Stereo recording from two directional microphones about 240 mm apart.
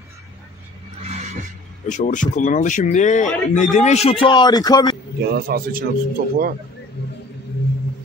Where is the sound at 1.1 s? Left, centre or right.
Right.